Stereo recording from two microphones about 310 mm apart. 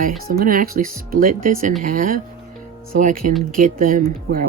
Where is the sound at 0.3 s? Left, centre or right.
Right.